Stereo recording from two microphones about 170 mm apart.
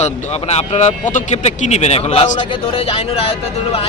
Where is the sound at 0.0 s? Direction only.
40° left (ahead or behind).